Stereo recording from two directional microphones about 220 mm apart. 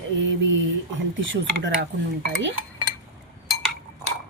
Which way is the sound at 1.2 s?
60° right (ahead or behind).